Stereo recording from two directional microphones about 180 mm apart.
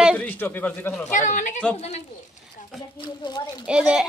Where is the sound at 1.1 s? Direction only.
45° left (ahead or behind).